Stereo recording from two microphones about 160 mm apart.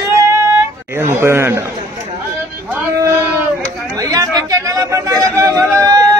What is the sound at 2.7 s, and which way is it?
Male singing, 15° right (ahead or behind).